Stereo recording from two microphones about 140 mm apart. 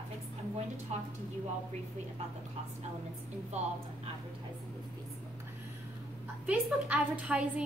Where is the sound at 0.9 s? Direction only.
50° right (ahead or behind).